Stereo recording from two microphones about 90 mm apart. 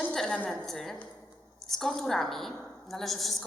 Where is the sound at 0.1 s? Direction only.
5° left (ahead or behind).